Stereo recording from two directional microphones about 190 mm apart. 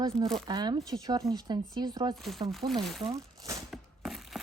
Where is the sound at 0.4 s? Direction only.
20° right (ahead or behind).